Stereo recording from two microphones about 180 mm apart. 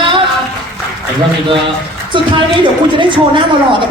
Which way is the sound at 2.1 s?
25° right (ahead or behind).